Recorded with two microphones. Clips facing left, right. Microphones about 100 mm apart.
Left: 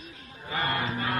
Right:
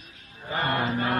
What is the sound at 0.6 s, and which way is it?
Chant, 40° right (ahead or behind).